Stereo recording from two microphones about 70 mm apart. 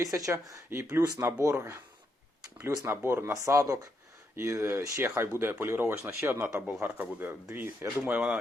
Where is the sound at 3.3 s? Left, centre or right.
Right.